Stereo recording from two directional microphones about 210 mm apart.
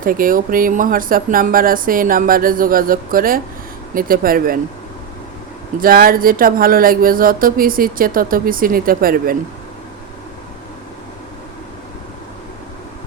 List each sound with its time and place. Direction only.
0.0 s speech: 40° right (ahead or behind)
5.8 s speech: 45° right (ahead or behind)